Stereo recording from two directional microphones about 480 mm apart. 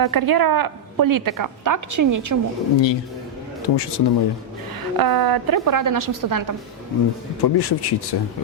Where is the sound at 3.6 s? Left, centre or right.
Left.